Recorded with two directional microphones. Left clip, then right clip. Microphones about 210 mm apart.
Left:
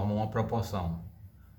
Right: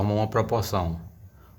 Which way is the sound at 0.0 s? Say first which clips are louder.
Right 7 dB; 45° right (ahead or behind).